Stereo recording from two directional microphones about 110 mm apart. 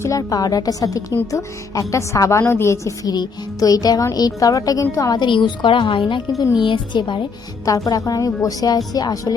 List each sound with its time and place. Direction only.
0.0 s a woman's voice: 30° left (ahead or behind)
7.6 s a woman's voice: 35° left (ahead or behind)